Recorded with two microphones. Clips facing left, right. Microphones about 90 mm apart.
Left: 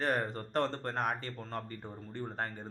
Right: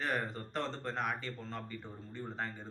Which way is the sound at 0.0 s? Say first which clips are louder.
Left 4 dB; 45° left (ahead or behind).